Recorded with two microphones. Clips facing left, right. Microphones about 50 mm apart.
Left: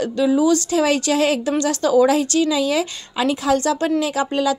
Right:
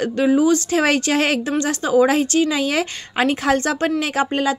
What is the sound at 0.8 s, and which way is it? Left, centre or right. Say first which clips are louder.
Speech: even; right.